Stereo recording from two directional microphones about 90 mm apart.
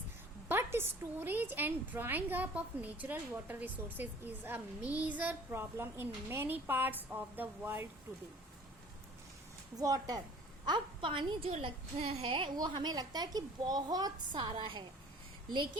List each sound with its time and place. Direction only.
0.4 s a woman's voice: 25° right (ahead or behind)
9.7 s a woman's voice: 45° right (ahead or behind)
10.7 s a woman's voice: 65° right (ahead or behind); by 14.1 s 45° right (ahead or behind)
14.3 s a woman's voice: 65° right (ahead or behind)